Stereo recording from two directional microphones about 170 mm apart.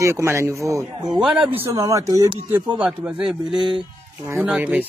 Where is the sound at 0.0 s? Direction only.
15° right (ahead or behind).